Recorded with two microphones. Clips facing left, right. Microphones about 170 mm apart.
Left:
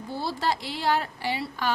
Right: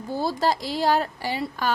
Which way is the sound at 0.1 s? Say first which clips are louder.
Right 5 dB; 45° right (ahead or behind).